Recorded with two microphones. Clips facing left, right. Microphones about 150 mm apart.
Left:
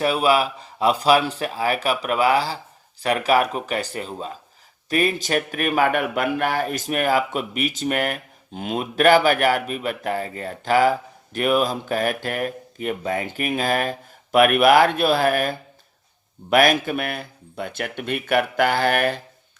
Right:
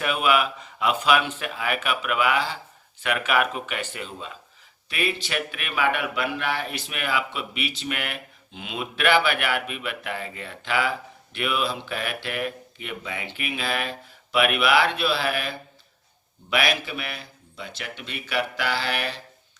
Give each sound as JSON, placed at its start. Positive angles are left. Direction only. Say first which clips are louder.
{"t": 0.0, "sound": "speech", "louder": "left 4 dB", "side_deg": 35}